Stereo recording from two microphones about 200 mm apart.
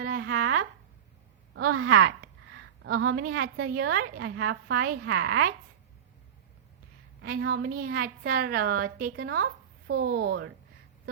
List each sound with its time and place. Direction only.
0.0 s a sound: 50° right (ahead or behind)
1.5 s a woman's voice: 90° right
3.9 s a woman's voice: 60° right (ahead or behind)
7.3 s a woman's voice: 50° right (ahead or behind)
10.2 s speech: 60° right (ahead or behind)